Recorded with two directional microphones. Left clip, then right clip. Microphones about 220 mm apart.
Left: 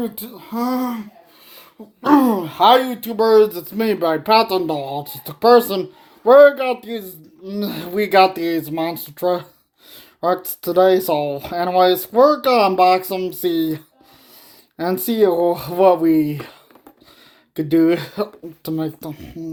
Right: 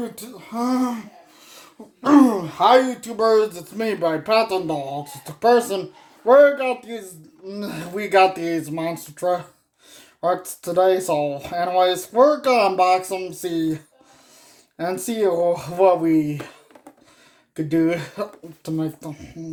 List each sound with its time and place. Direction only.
0.2 s speech: 35° left (ahead or behind)
2.0 s speech: 30° left (ahead or behind)
17.5 s speech: 35° left (ahead or behind)